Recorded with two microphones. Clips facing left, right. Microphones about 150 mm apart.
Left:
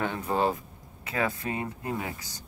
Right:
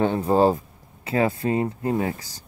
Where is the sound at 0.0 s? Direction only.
30° right (ahead or behind).